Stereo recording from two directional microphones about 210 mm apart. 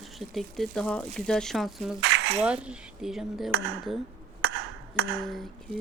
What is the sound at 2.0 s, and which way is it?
Dishes, 55° right (ahead or behind).